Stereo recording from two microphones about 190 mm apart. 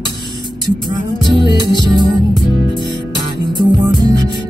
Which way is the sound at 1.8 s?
25° right (ahead or behind).